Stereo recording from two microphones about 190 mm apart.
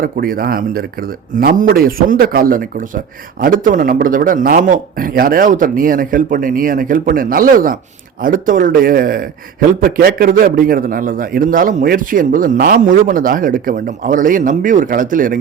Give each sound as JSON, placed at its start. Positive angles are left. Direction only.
{"t": 0.0, "sound": "a man's voice", "side_deg": -50}